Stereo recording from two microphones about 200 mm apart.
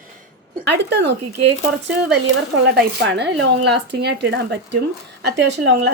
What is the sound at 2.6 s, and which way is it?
Speech, 55° right (ahead or behind).